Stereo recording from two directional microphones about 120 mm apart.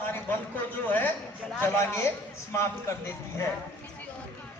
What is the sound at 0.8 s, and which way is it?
A man's voice, 15° left (ahead or behind).